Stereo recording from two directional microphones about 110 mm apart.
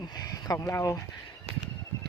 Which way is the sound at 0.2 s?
30° left (ahead or behind).